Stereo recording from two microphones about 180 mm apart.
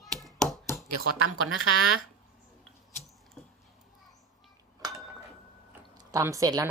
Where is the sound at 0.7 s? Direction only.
15° left (ahead or behind).